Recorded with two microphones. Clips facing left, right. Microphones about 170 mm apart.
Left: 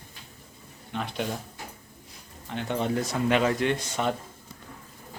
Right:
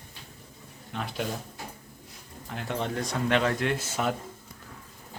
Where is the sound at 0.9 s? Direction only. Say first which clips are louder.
Left 2 dB; centre (ahead or behind).